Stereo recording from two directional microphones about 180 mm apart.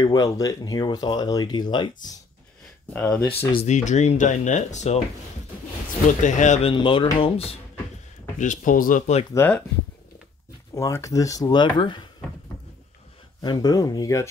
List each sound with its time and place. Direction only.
0.0 s speech: 20° left (ahead or behind)
2.9 s speech: 5° left (ahead or behind)
3.3 s speech: 40° left (ahead or behind)
6.2 s speech: 45° left (ahead or behind)
6.7 s speech: 30° left (ahead or behind)
8.4 s speech: 45° left (ahead or behind)
9.3 s speech: 15° left (ahead or behind)
10.7 s speech: 15° left (ahead or behind)
13.4 s speech: 20° left (ahead or behind)